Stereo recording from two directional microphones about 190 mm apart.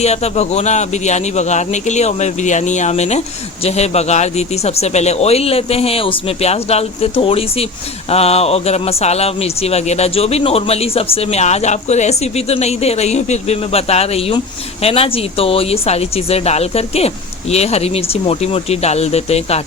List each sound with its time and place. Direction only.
0.0 s speech: 35° left (ahead or behind)